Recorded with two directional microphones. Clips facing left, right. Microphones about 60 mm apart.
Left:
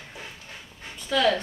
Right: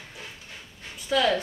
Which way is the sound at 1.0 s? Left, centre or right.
Centre.